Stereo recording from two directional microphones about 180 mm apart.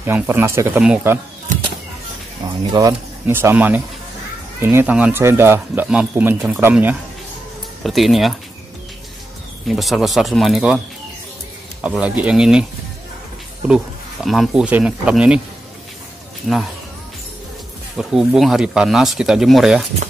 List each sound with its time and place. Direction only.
0.0 s speech: 10° right (ahead or behind)
2.4 s speech: 25° right (ahead or behind)
3.3 s speech: 10° right (ahead or behind)
9.7 s speech: centre (ahead or behind)
12.0 s speech: 5° right (ahead or behind)
13.7 s speech: centre (ahead or behind)
17.9 s speech: centre (ahead or behind)